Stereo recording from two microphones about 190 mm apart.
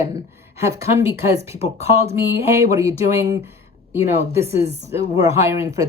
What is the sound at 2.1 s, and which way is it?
A woman's voice, 15° right (ahead or behind).